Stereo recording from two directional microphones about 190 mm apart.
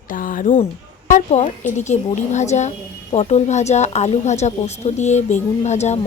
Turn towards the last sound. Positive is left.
turn(degrees=35)  # may be behind; listen again after turning